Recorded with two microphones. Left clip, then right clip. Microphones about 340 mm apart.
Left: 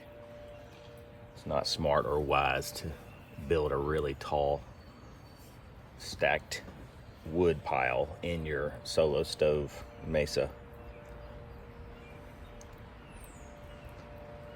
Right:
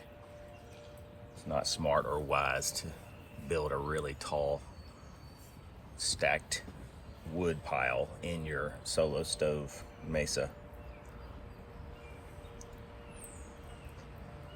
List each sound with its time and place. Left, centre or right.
1.5 s speech: left
6.1 s speech: left